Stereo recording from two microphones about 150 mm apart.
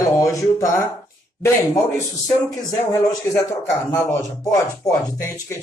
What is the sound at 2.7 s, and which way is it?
Speech, 20° left (ahead or behind).